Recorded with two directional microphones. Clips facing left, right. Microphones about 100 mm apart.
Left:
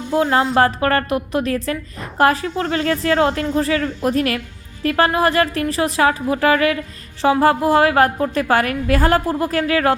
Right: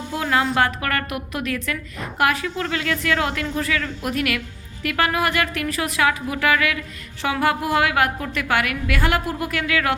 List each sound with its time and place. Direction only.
0.1 s a woman's voice: 30° left (ahead or behind)